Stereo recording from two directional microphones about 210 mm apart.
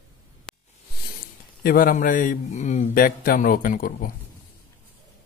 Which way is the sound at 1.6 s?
45° left (ahead or behind).